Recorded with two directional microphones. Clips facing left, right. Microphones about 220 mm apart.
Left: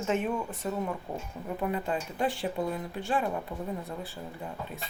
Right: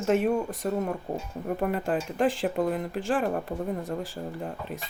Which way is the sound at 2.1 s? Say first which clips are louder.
Right 6 dB; 90° right.